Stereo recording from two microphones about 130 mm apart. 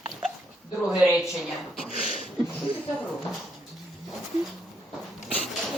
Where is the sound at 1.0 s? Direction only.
5° right (ahead or behind).